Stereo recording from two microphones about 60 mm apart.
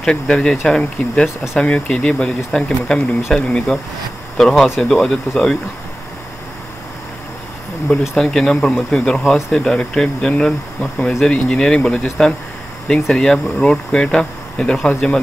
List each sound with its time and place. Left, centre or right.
0.0 s speech: centre
1.2 s speech: centre
1.6 s speech: centre
8.2 s speech: centre